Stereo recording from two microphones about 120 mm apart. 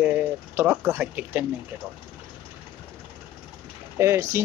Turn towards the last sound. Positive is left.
turn(degrees=-20)  # may be behind; listen again after turning